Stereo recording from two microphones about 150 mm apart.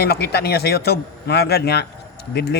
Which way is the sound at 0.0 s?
90° left.